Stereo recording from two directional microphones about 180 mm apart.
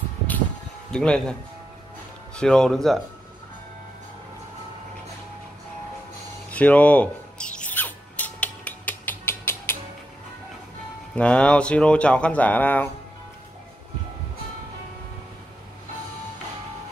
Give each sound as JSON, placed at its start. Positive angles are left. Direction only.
{"t": 0.9, "sound": "speech", "side_deg": 5}
{"t": 2.3, "sound": "speech", "side_deg": 5}
{"t": 6.5, "sound": "a sound", "side_deg": 10}
{"t": 11.1, "sound": "speech", "side_deg": 5}